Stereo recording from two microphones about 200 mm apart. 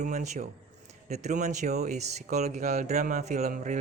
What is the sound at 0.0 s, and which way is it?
Speech, 35° right (ahead or behind).